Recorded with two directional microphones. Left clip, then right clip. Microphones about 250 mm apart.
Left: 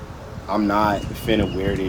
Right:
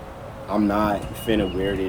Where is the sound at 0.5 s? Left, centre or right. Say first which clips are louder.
Left 2 dB; centre.